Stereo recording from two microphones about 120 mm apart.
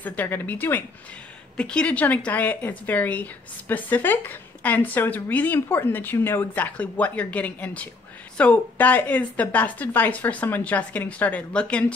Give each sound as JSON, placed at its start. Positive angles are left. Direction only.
{"t": 0.0, "sound": "speech", "side_deg": 15}